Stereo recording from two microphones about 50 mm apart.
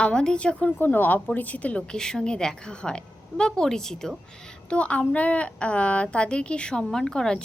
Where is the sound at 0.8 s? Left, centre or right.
Left.